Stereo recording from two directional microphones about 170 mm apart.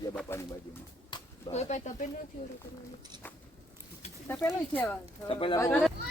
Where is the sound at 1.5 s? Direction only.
40° left (ahead or behind).